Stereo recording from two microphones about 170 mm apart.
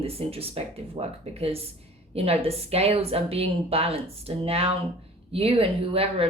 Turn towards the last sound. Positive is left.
turn(degrees=-35)  # may be behind; listen again after turning